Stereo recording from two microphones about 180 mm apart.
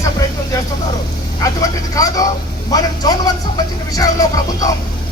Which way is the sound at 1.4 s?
20° left (ahead or behind).